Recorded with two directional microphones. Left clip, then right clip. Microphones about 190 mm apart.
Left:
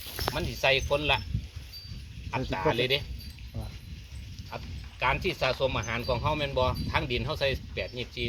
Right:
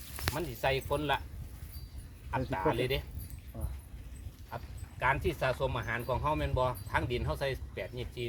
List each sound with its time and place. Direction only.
0.3 s speech: 5° right (ahead or behind)
2.3 s speech: 5° right (ahead or behind)
4.5 s speech: 5° right (ahead or behind)